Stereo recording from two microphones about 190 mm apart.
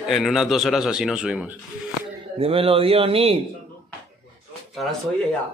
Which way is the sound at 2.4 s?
30° right (ahead or behind).